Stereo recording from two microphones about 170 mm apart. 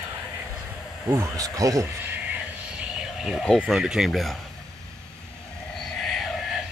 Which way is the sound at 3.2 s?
Centre (ahead or behind).